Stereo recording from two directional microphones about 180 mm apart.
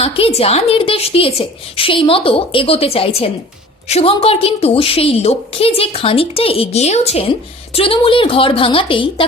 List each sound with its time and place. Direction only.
0.0 s a woman's voice: 35° left (ahead or behind)